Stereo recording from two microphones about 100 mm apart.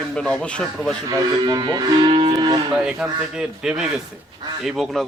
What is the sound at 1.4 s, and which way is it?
Speech, 45° right (ahead or behind).